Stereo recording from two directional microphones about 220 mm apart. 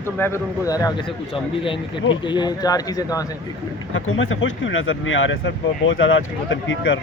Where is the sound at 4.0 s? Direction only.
60° left (ahead or behind).